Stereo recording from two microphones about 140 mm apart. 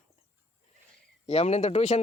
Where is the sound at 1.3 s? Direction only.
50° left (ahead or behind).